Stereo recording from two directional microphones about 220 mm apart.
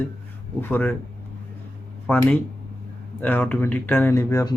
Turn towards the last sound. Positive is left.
turn(degrees=15)  # may be behind; listen again after turning